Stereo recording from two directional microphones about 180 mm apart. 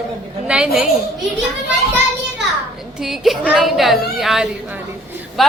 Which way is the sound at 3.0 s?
Centre (ahead or behind).